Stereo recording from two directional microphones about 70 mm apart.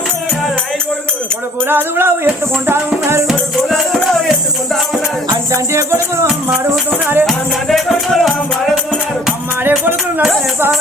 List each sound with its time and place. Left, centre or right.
1.6 s music: right
3.2 s music: centre
5.5 s music: right
6.9 s music: right
7.3 s music: centre
9.6 s music: right